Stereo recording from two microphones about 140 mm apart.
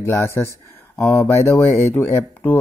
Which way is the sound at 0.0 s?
20° left (ahead or behind).